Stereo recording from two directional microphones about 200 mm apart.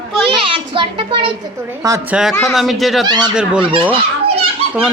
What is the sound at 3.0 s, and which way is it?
Speech, 20° right (ahead or behind).